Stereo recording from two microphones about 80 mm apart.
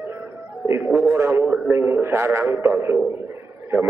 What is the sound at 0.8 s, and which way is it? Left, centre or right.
A man's voice, right.